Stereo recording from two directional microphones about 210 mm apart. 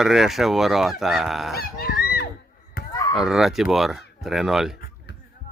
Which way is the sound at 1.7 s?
45° left (ahead or behind).